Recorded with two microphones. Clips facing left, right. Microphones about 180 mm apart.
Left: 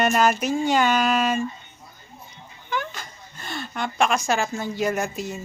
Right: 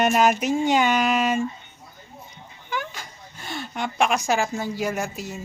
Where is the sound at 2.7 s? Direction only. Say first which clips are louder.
Left 2 dB; 10° right (ahead or behind).